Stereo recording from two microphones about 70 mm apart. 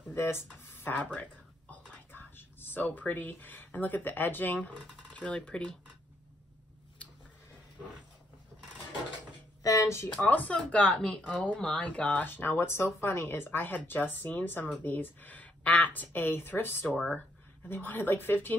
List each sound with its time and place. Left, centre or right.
0.1 s speech: left
0.9 s speech: left
1.7 s whispering: left
5.1 s speech: centre
9.6 s a sound: left
10.2 s speech: left
12.3 s speech: left
16.8 s speech: left
17.6 s speech: left